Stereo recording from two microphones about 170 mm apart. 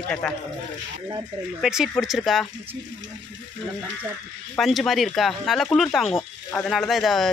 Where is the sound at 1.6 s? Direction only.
5° right (ahead or behind).